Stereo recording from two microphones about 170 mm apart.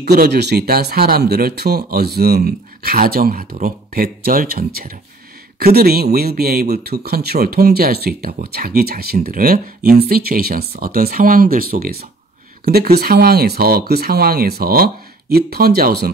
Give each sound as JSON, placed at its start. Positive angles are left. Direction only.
{"t": 0.0, "sound": "speech", "side_deg": -70}